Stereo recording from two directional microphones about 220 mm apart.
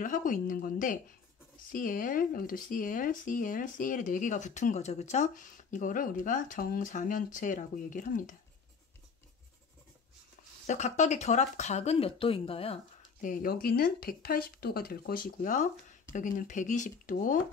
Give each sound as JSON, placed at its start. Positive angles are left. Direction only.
{"t": 0.0, "sound": "speech", "side_deg": 35}
{"t": 10.7, "sound": "speech", "side_deg": 30}
{"t": 13.2, "sound": "speech", "side_deg": 40}